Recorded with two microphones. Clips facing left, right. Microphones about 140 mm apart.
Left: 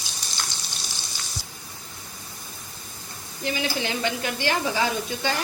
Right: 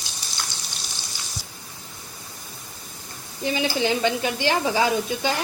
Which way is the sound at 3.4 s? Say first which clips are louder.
Right 4 dB; 20° right (ahead or behind).